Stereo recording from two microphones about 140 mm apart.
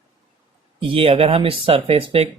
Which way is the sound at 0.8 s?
40° right (ahead or behind).